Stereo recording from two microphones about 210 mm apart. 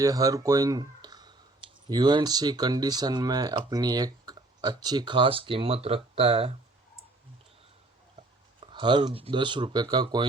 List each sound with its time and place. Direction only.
0.0 s speech: 15° right (ahead or behind)
8.6 s speech: 20° right (ahead or behind)